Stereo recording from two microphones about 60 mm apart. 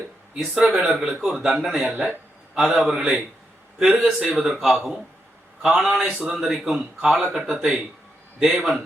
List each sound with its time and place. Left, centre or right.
0.3 s a man's voice: centre